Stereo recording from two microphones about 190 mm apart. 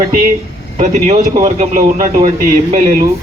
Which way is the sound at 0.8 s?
40° right (ahead or behind).